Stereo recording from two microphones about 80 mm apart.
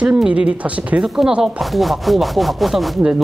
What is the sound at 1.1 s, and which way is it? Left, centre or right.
Speech, centre.